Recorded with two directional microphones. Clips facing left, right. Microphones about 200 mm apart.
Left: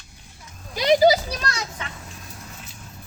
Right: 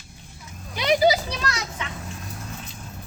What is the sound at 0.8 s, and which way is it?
Speech, 35° left (ahead or behind).